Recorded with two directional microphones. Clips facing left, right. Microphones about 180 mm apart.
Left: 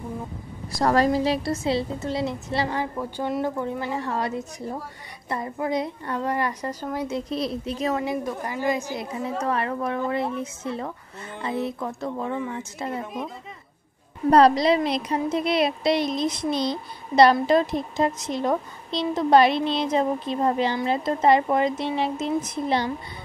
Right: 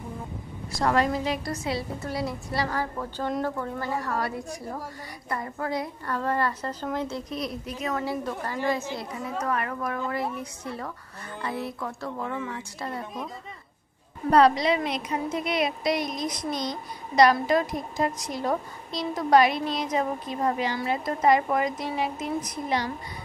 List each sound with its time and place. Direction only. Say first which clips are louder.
0.7 s a woman's voice: left 4 dB; 35° left (ahead or behind); by 7.2 s 10° left (ahead or behind)
7.2 s a woman's voice: left 5 dB; 30° left (ahead or behind)
8.0 s a woman's voice: left 3 dB; 15° left (ahead or behind)
14.3 s a woman's voice: left 3 dB; 35° left (ahead or behind)